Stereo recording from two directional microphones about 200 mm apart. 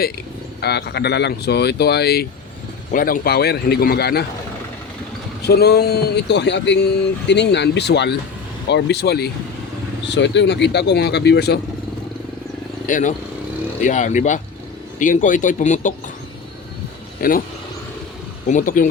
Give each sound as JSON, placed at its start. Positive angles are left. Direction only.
{"t": 0.6, "sound": "a man's voice", "side_deg": 55}
{"t": 5.4, "sound": "speech", "side_deg": 55}
{"t": 12.9, "sound": "speech", "side_deg": 40}
{"t": 17.2, "sound": "a man's voice", "side_deg": 45}
{"t": 18.4, "sound": "speech", "side_deg": 40}